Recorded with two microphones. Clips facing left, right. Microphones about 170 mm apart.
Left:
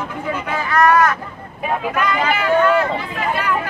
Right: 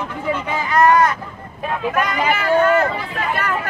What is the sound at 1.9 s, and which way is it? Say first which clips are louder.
Speech: right 1 dB; 45° right (ahead or behind).